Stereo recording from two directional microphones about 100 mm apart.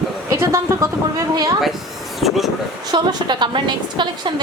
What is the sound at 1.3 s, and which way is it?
Speech, 40° right (ahead or behind).